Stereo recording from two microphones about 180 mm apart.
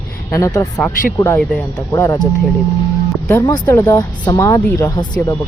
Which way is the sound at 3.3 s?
20° left (ahead or behind).